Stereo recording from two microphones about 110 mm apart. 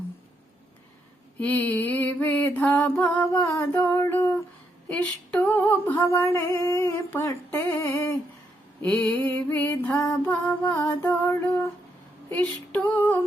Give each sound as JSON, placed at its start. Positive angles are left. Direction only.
{"t": 1.4, "sound": "mantra", "side_deg": 15}
{"t": 3.3, "sound": "female singing", "side_deg": 25}
{"t": 3.8, "sound": "a sound", "side_deg": 25}
{"t": 4.9, "sound": "female singing", "side_deg": 10}
{"t": 8.8, "sound": "mantra", "side_deg": 15}
{"t": 10.0, "sound": "female singing", "side_deg": 20}
{"t": 11.0, "sound": "a sound", "side_deg": 20}
{"t": 12.3, "sound": "mantra", "side_deg": 15}